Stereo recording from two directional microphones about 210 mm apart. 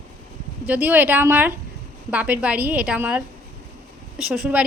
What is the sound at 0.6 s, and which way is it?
A woman's voice, 10° right (ahead or behind).